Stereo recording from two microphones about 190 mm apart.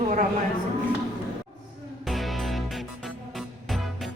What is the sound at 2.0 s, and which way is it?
Music, centre (ahead or behind).